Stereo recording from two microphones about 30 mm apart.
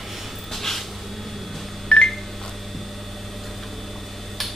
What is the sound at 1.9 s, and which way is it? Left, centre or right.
Telephone dialing, left.